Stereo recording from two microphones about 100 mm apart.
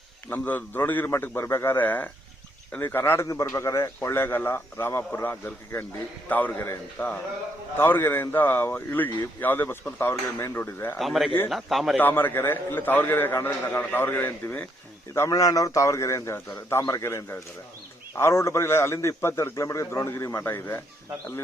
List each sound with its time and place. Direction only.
0.3 s a man's voice: 20° left (ahead or behind)
10.9 s speech: centre (ahead or behind)
11.9 s speech: 20° left (ahead or behind)